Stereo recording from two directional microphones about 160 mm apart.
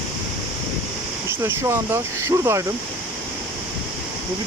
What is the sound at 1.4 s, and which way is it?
Speech, 15° right (ahead or behind).